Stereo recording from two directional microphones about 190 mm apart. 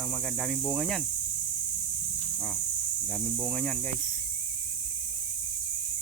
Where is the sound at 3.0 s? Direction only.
Centre (ahead or behind).